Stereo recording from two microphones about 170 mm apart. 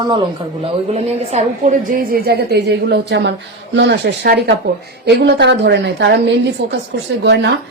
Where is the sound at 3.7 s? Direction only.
90° right.